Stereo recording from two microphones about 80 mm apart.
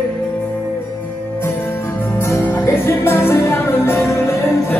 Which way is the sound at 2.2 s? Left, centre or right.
Left.